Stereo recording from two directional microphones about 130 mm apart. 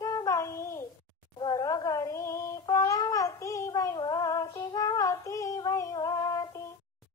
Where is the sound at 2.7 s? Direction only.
25° left (ahead or behind).